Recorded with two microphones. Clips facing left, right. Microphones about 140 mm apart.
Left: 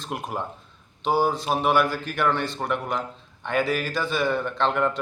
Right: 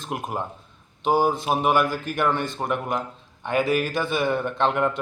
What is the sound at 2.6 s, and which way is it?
Speech, 15° right (ahead or behind).